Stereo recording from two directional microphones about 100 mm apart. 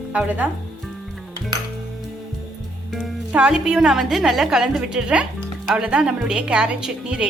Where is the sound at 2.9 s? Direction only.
10° right (ahead or behind).